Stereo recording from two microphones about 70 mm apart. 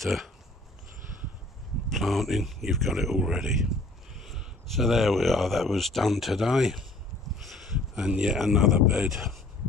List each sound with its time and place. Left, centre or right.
0.0 s speech: centre
1.9 s speech: centre
7.4 s a sound: centre
8.2 s speech: centre